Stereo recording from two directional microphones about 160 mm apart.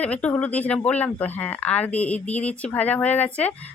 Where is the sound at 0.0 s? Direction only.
10° left (ahead or behind).